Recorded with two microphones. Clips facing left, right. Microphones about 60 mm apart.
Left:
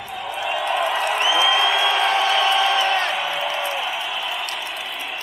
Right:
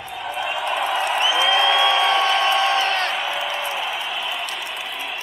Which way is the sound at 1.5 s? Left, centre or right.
Centre.